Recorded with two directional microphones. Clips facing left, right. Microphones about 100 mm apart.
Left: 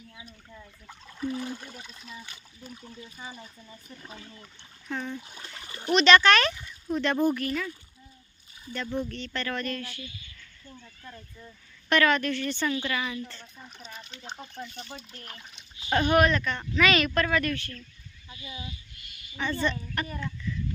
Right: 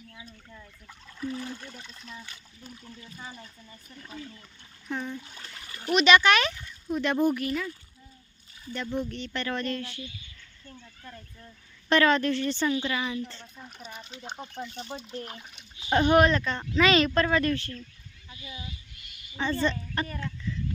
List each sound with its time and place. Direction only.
0.1 s speech: 15° left (ahead or behind)
4.9 s speech: 10° right (ahead or behind)
5.1 s speech: 15° left (ahead or behind)
5.9 s speech: 10° right (ahead or behind)
6.5 s a sound: 10° left (ahead or behind)
6.9 s speech: 15° right (ahead or behind)
9.0 s speech: 20° right (ahead or behind)
11.9 s speech: 30° right (ahead or behind)
13.4 s speech: 5° right (ahead or behind); by 15.4 s 25° right (ahead or behind)
15.4 s speech: 10° right (ahead or behind)
16.0 s speech: 25° right (ahead or behind)
18.3 s speech: 15° left (ahead or behind)
19.4 s speech: 30° right (ahead or behind)